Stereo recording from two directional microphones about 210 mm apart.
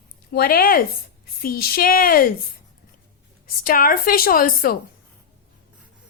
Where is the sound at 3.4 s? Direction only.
40° left (ahead or behind).